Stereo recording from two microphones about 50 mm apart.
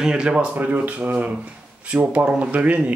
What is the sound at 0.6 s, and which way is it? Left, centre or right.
Speech, right.